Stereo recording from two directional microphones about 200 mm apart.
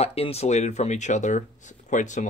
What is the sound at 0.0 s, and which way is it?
Speech, 30° left (ahead or behind).